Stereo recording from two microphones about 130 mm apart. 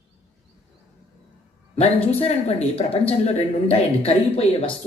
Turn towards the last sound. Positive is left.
turn(degrees=45)  # may be behind; listen again after turning